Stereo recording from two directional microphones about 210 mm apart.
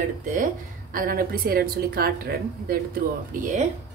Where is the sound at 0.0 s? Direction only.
40° right (ahead or behind).